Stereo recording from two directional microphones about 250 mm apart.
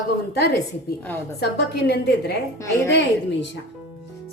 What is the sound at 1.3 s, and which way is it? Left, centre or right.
A woman's voice, left.